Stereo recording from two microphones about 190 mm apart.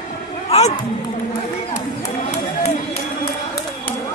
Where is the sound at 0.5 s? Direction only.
30° left (ahead or behind).